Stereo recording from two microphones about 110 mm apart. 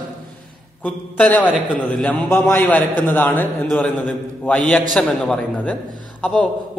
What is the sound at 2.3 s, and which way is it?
A man's voice, 20° left (ahead or behind).